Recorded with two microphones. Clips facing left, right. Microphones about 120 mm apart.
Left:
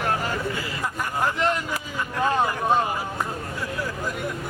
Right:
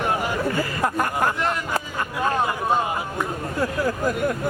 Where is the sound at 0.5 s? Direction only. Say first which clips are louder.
Right 6 dB; 50° right (ahead or behind).